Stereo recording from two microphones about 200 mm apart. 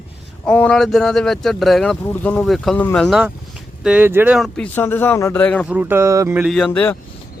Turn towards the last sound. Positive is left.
turn(degrees=5)  # may be behind; listen again after turning